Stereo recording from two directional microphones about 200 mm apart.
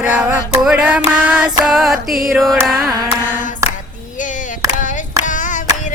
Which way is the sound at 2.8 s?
20° right (ahead or behind).